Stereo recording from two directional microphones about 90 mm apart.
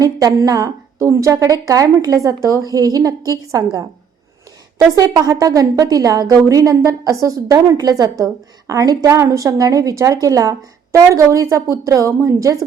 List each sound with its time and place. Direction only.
0.0 s a woman's voice: 45° right (ahead or behind)
4.9 s a woman's voice: 45° right (ahead or behind)